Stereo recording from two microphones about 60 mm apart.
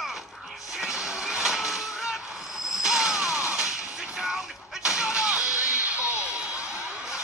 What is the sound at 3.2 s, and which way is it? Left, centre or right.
Music, centre.